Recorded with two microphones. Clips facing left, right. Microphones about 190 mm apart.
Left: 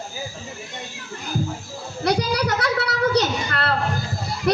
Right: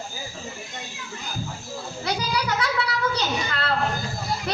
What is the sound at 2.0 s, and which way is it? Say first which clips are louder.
A woman's voice: left 6 dB; 65° left (ahead or behind).